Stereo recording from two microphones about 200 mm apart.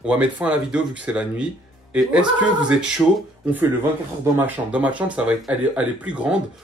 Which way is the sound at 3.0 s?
5° right (ahead or behind).